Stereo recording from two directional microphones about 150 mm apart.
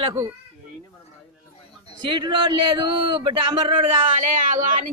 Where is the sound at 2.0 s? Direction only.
30° right (ahead or behind).